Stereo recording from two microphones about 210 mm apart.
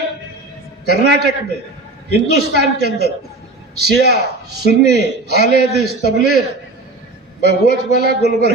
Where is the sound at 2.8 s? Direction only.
50° right (ahead or behind).